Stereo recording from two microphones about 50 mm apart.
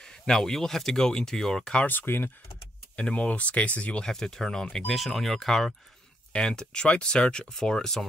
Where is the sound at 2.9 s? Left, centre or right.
Left.